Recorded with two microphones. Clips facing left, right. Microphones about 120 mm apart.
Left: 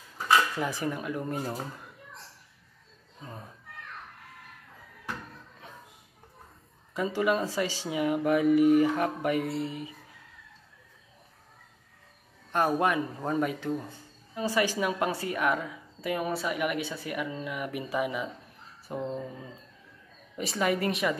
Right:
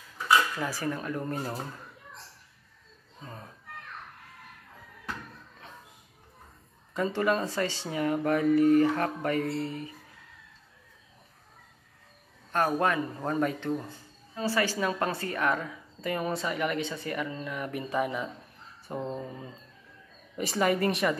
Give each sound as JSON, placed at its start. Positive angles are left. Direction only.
{"t": 0.6, "sound": "speech", "side_deg": 20}
{"t": 3.3, "sound": "speech", "side_deg": 10}
{"t": 6.9, "sound": "speech", "side_deg": 10}
{"t": 12.5, "sound": "a woman's voice", "side_deg": 15}